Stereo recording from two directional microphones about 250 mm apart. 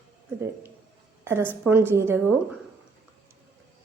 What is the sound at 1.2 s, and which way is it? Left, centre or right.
Speech, centre.